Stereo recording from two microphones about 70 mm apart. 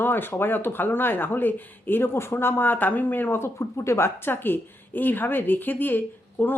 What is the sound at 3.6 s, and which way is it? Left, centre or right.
Speech, left.